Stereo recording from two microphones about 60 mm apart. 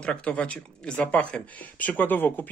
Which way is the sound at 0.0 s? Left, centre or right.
Centre.